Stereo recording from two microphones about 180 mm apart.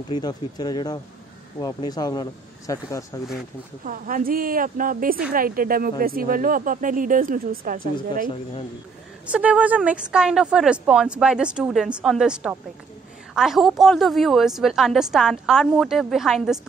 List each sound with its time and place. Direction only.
0.1 s speech: 25° left (ahead or behind)
3.8 s speech: 50° right (ahead or behind)
9.2 s a woman's voice: 5° right (ahead or behind)